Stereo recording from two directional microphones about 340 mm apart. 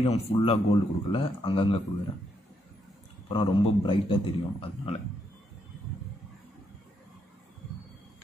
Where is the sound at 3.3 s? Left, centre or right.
Centre.